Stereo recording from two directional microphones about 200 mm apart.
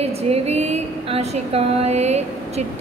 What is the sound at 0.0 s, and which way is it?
Speech, 30° right (ahead or behind).